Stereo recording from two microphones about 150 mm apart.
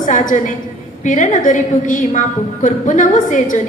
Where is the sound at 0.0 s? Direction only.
60° left (ahead or behind).